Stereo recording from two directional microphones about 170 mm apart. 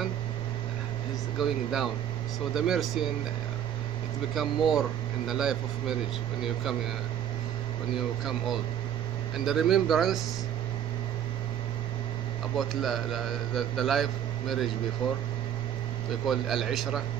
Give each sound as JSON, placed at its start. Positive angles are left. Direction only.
{"t": 1.4, "sound": "speech", "side_deg": 0}
{"t": 4.4, "sound": "speech", "side_deg": 0}
{"t": 7.9, "sound": "speech", "side_deg": 0}
{"t": 12.5, "sound": "speech", "side_deg": 0}
{"t": 16.1, "sound": "speech", "side_deg": 0}